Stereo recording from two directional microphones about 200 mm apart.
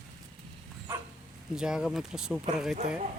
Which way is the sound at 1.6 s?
5° right (ahead or behind).